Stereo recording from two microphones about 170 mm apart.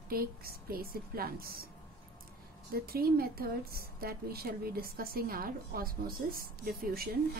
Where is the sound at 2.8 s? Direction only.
65° right (ahead or behind).